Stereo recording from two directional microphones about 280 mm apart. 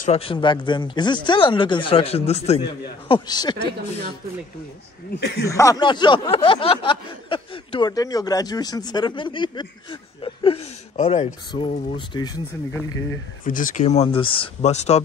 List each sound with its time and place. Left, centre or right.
0.0 s speech: left
5.1 s speech: left
5.5 s speech: centre
13.4 s speech: left